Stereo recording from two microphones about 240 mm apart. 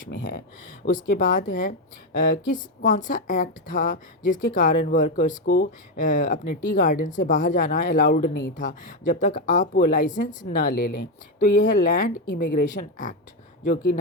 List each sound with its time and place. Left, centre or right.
1.1 s a woman's voice: left